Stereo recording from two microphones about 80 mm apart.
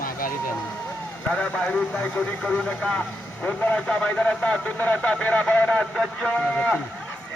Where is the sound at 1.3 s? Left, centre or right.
Centre.